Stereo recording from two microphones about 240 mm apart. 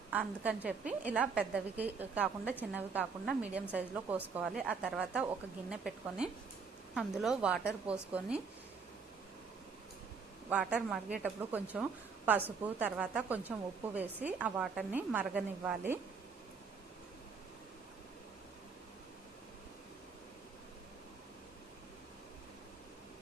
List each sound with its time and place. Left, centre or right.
0.1 s a woman's voice: centre
10.5 s a woman's voice: centre